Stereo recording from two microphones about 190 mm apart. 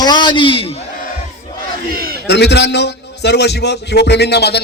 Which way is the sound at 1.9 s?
55° right (ahead or behind).